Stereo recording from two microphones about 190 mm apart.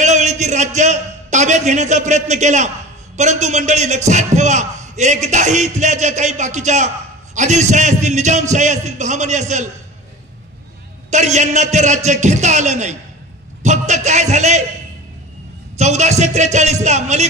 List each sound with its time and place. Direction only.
0.0 s a sound: 40° right (ahead or behind)
3.2 s speech: 40° right (ahead or behind)
11.1 s speech: 40° right (ahead or behind)
15.8 s speech: 35° right (ahead or behind)